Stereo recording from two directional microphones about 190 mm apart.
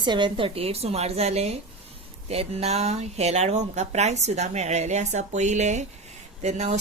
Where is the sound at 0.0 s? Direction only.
25° right (ahead or behind).